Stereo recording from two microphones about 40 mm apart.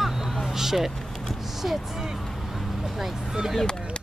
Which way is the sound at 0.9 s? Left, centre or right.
Centre.